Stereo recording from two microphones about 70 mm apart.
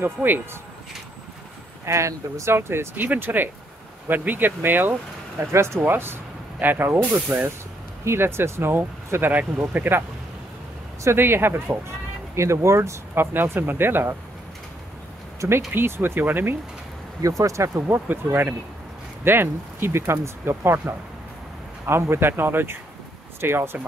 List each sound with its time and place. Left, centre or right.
0.0 s speech: right
1.9 s speech: right
2.5 s speech: right
5.5 s speech: right
5.8 s speech: right
8.0 s speech: right
11.1 s speech: right
12.4 s speech: right
15.7 s speech: right
17.2 s speech: right
17.7 s speech: right
21.8 s speech: right